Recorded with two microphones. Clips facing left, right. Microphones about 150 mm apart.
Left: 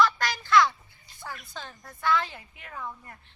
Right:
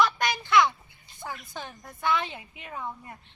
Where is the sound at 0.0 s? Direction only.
20° right (ahead or behind).